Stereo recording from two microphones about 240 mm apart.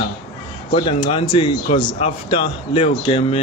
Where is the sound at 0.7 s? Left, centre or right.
Left.